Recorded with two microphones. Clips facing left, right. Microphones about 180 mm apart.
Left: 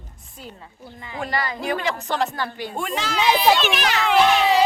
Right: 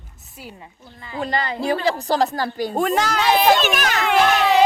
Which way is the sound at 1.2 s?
25° right (ahead or behind).